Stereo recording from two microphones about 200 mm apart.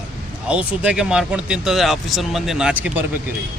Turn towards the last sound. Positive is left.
turn(degrees=-10)  # may be behind; listen again after turning